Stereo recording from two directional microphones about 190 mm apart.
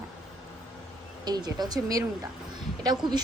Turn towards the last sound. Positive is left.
turn(degrees=-20)  # may be behind; listen again after turning